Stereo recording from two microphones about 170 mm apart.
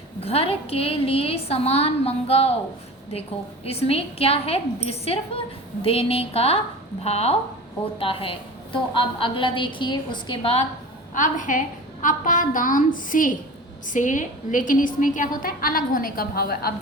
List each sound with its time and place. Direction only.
0.2 s a woman's voice: 35° left (ahead or behind)
11.1 s a woman's voice: 50° left (ahead or behind)